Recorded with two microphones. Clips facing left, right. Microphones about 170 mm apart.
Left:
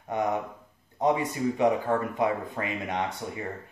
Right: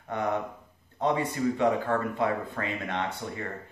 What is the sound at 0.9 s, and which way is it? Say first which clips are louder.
Speech: left 2 dB; 15° left (ahead or behind).